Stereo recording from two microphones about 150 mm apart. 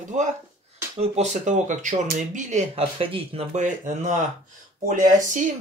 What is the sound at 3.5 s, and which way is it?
Speech, 50° right (ahead or behind).